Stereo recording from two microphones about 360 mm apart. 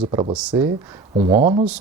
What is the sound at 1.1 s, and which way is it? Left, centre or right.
Speech, centre.